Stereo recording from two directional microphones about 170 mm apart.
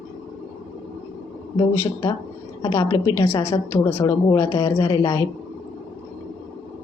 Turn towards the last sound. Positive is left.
turn(degrees=15)  # may be behind; listen again after turning